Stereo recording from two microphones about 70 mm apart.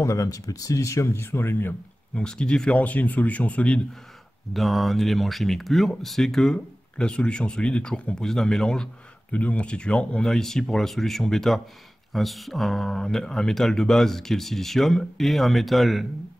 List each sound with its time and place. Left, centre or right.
0.0 s speech: left
2.1 s speech: centre
4.6 s speech: centre
9.3 s speech: left; by 16.1 s centre